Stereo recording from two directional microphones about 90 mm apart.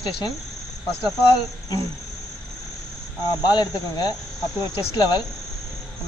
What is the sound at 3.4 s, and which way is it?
Speech, 50° left (ahead or behind).